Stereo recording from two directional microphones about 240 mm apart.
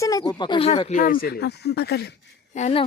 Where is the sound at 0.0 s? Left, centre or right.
Centre; by 2.0 s left.